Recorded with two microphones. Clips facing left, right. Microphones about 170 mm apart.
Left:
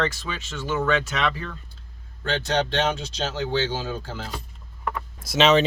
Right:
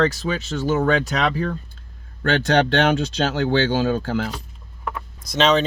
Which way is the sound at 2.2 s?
65° right (ahead or behind).